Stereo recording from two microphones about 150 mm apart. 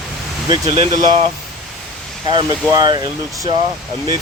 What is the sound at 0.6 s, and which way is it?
Speech, 45° right (ahead or behind).